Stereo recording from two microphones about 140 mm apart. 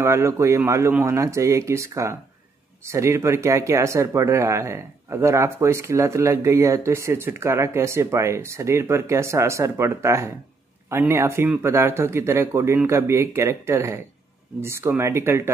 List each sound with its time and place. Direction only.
0.0 s speech: 20° right (ahead or behind)